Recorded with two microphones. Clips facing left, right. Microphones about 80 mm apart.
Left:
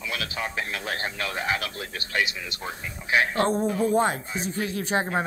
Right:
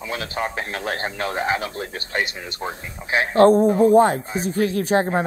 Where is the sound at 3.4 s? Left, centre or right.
Right.